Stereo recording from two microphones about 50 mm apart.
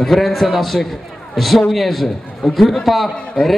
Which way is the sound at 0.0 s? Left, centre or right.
Centre.